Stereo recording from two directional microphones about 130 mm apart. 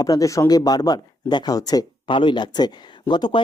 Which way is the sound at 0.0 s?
30° left (ahead or behind).